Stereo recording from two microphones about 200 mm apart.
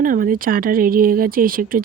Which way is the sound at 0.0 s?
45° right (ahead or behind).